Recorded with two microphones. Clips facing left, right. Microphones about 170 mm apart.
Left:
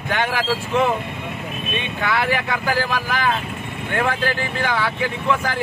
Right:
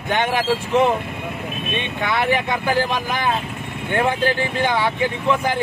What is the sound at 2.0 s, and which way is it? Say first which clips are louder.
Speech: right 1 dB; 20° right (ahead or behind).